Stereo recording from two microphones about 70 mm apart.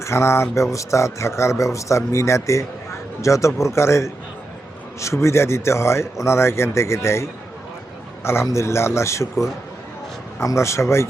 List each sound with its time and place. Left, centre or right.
0.0 s a man's voice: left